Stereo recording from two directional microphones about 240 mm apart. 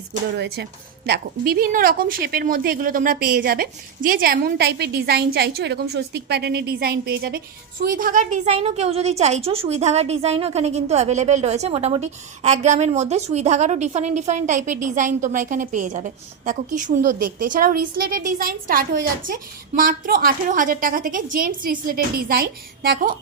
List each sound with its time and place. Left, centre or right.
0.3 s a woman's voice: right